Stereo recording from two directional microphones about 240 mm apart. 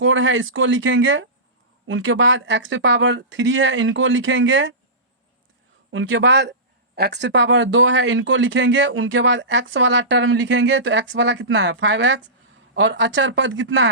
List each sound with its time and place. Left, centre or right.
0.0 s speech: right
5.9 s speech: right